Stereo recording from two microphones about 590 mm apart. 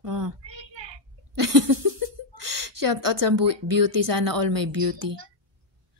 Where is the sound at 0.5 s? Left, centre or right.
Right.